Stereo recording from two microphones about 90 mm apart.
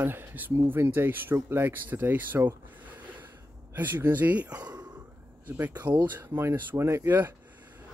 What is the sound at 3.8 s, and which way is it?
Speech, 25° right (ahead or behind).